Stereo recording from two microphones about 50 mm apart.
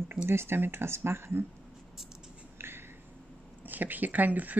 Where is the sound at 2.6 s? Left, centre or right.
Right.